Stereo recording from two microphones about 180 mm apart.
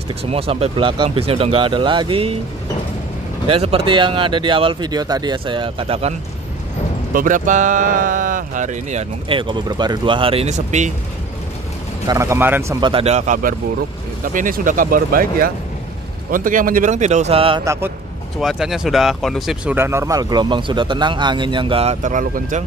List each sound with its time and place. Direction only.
0.2 s speech: 35° right (ahead or behind)
3.4 s speech: 35° right (ahead or behind)
7.2 s speech: 45° right (ahead or behind)
9.3 s speech: 25° right (ahead or behind)
12.1 s speech: 15° right (ahead or behind)
12.8 s speech: 35° right (ahead or behind)
17.6 s speech: 15° right (ahead or behind)
18.4 s speech: centre (ahead or behind); by 22.6 s 45° right (ahead or behind)